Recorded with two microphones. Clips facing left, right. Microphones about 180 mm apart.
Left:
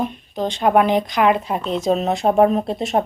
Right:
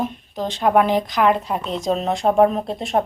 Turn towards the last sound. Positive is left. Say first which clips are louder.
# left 2 dB
turn(degrees=0)  # may be behind; listen again after turning